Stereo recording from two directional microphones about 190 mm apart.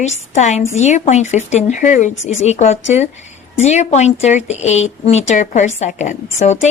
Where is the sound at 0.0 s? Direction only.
35° left (ahead or behind).